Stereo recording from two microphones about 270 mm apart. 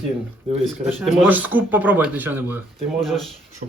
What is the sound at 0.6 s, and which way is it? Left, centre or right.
Speech, centre.